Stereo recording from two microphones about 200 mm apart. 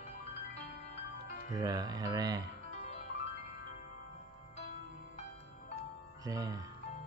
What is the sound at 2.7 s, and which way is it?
Music, 35° left (ahead or behind).